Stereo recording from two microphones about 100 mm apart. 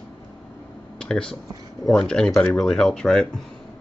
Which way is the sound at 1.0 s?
5° left (ahead or behind).